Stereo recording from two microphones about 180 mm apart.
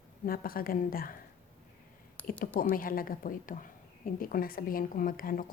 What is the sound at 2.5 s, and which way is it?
A woman's voice, 50° left (ahead or behind).